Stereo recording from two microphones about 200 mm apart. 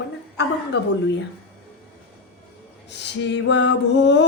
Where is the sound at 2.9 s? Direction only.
60° left (ahead or behind).